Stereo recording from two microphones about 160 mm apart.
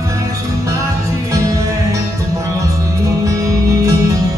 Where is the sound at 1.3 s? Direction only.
20° right (ahead or behind).